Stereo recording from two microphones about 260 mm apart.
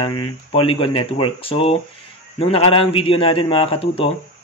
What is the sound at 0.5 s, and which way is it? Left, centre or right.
Speech, left.